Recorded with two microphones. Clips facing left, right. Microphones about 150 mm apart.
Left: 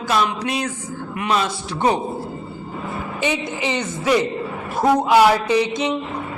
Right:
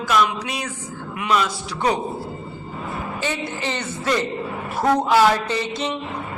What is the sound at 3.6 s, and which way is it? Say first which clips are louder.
A man's voice: left 3 dB; 15° left (ahead or behind).